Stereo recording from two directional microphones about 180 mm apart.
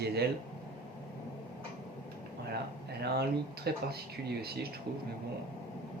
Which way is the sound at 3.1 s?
60° right (ahead or behind).